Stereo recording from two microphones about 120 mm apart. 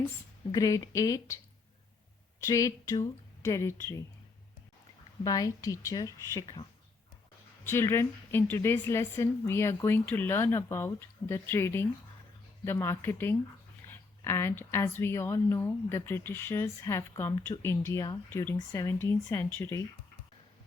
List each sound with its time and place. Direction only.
0.5 s a woman's voice: 30° left (ahead or behind)
2.5 s a woman's voice: 30° left (ahead or behind)
5.2 s a woman's voice: 30° left (ahead or behind)
7.6 s a woman's voice: 20° left (ahead or behind)